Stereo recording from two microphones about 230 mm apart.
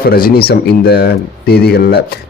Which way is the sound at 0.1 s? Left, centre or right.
Left.